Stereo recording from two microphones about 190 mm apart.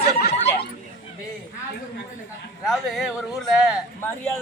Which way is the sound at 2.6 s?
Centre (ahead or behind).